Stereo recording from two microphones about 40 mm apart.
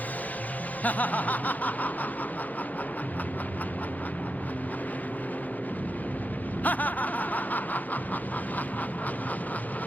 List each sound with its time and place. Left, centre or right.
0.9 s snicker: left
6.6 s snicker: left